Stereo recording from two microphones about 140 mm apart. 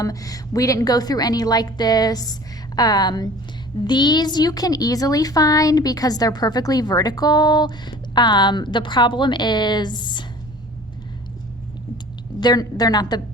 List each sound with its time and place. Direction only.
0.0 s a woman's voice: 25° left (ahead or behind)
12.4 s a woman's voice: 30° left (ahead or behind)